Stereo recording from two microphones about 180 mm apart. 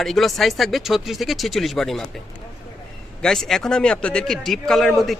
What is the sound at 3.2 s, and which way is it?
Speech, centre (ahead or behind).